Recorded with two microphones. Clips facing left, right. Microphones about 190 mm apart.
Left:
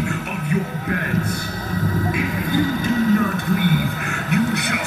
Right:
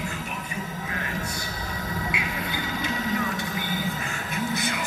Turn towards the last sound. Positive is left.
turn(degrees=65)  # may be behind; listen again after turning